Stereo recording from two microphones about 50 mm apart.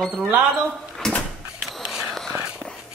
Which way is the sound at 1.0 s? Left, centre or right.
Centre.